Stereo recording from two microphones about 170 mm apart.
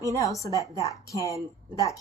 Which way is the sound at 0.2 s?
20° left (ahead or behind).